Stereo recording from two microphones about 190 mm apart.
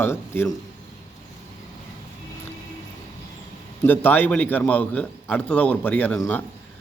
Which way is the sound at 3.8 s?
10° left (ahead or behind).